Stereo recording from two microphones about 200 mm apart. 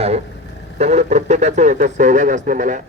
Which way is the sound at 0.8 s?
35° right (ahead or behind).